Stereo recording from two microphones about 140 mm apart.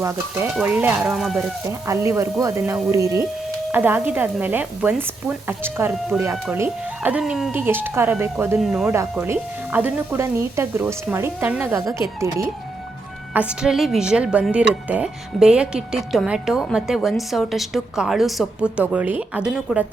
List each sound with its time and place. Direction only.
0.6 s speech: 15° right (ahead or behind)
1.9 s speech: 20° right (ahead or behind); by 7.5 s 5° right (ahead or behind)
7.5 s speech: 15° right (ahead or behind)
8.5 s a woman's voice: centre (ahead or behind)
9.2 s speech: 15° right (ahead or behind)
13.3 s a woman's voice: 10° right (ahead or behind)